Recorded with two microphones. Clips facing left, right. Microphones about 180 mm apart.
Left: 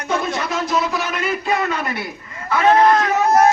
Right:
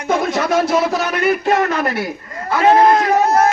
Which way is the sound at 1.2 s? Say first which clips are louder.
Right 6 dB; 50° right (ahead or behind).